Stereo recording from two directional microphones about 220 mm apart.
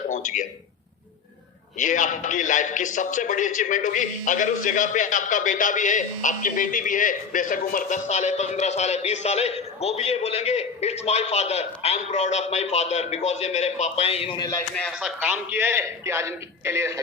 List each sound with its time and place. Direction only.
0.1 s a sound: 35° left (ahead or behind)
1.8 s a man's voice: 35° left (ahead or behind); by 14.6 s 20° left (ahead or behind)
14.8 s a man's voice: 5° right (ahead or behind)